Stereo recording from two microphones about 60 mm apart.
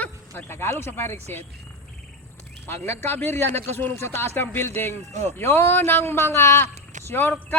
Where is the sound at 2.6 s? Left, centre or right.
Left.